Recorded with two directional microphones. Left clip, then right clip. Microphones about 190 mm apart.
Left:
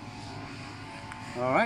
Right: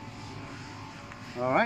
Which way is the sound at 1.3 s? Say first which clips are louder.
Even; centre (ahead or behind).